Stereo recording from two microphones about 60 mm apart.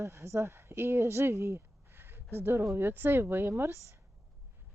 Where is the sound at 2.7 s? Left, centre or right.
Right.